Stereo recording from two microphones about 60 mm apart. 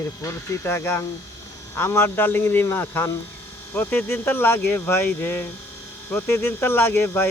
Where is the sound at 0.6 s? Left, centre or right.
Left.